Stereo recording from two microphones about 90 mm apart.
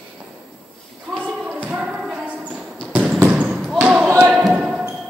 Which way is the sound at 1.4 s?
15° right (ahead or behind).